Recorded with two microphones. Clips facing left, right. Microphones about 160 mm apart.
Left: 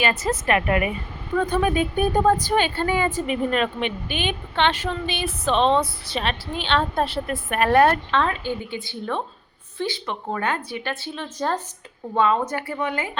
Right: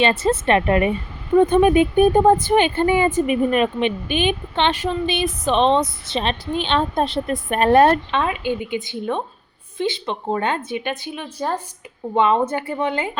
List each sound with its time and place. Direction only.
0.0 s a woman's voice: 30° right (ahead or behind); by 11.6 s 10° right (ahead or behind)
12.1 s a woman's voice: 20° right (ahead or behind)